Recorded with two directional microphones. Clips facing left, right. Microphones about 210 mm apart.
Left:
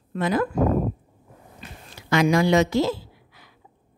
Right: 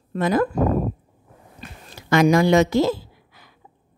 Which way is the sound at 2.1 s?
45° right (ahead or behind).